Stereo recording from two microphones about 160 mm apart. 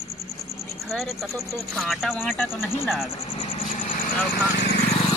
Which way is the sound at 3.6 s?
55° left (ahead or behind).